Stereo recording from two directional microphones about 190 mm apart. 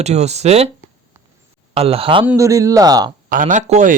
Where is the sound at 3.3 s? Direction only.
40° right (ahead or behind).